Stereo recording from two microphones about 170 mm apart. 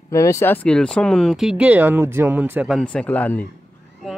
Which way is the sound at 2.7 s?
5° left (ahead or behind).